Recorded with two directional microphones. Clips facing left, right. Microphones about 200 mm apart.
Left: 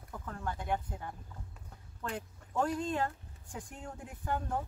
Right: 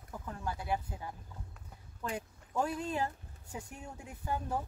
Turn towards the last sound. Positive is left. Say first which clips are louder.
# left 1 dB
turn(degrees=-10)  # may be behind; listen again after turning